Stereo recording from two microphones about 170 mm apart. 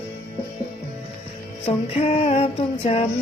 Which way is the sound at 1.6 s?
35° left (ahead or behind).